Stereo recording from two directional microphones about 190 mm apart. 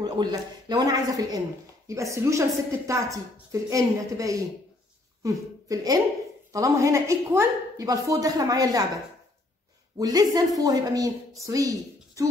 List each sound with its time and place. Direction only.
0.0 s a man's voice: 20° right (ahead or behind)
9.9 s a man's voice: 20° right (ahead or behind)